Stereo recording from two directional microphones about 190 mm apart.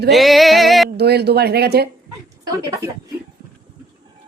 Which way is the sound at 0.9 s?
60° right (ahead or behind).